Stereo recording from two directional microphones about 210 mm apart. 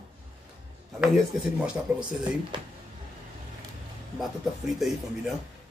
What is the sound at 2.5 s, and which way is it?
Speech, 20° right (ahead or behind).